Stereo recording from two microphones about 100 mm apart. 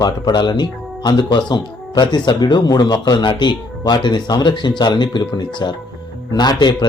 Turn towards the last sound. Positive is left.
turn(degrees=45)  # may be behind; listen again after turning